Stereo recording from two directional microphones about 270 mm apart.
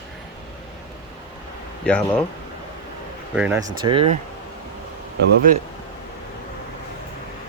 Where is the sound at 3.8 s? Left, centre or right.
Centre.